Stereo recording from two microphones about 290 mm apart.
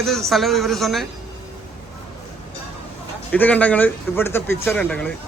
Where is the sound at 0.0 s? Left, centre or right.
Centre.